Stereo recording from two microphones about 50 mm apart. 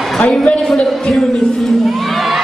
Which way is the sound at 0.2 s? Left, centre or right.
Centre.